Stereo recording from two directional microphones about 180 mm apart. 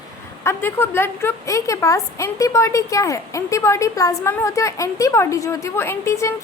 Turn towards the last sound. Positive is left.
turn(degrees=15)  # may be behind; listen again after turning